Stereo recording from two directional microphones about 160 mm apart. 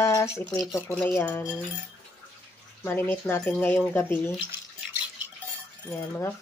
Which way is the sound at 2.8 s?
15° left (ahead or behind).